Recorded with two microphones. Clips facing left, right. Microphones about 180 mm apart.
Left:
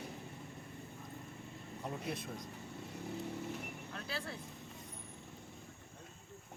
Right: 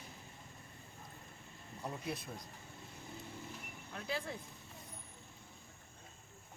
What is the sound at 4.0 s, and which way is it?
Speech, 15° right (ahead or behind).